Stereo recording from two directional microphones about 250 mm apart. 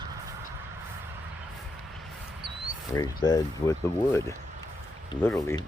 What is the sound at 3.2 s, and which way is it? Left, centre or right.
Speech, centre.